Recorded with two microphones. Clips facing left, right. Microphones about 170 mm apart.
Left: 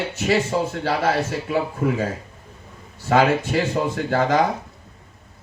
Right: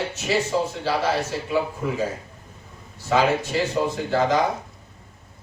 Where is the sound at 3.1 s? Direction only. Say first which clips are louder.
Left 3 dB; 55° left (ahead or behind).